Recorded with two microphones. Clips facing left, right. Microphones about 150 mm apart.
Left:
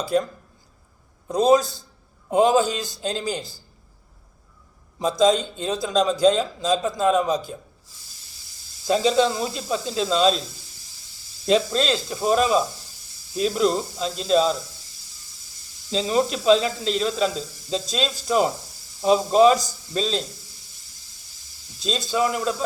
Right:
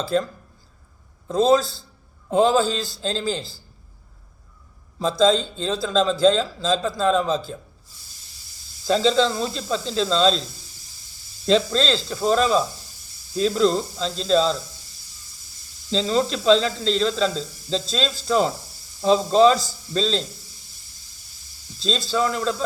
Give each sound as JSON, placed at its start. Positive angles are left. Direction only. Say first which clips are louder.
{"t": 0.0, "sound": "a man's voice", "louder": "even", "side_deg": 15}
{"t": 1.3, "sound": "a man's voice", "louder": "even", "side_deg": 15}
{"t": 4.9, "sound": "a man's voice", "louder": "even", "side_deg": 15}
{"t": 8.9, "sound": "a man's voice", "louder": "even", "side_deg": 15}
{"t": 11.4, "sound": "a man's voice", "louder": "right 1 dB", "side_deg": 10}
{"t": 15.9, "sound": "a man's voice", "louder": "even", "side_deg": 10}
{"t": 22.1, "sound": "a man's voice", "louder": "left 1 dB", "side_deg": 15}